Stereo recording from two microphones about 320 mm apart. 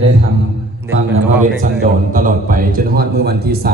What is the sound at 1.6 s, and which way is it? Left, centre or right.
A man's voice, right.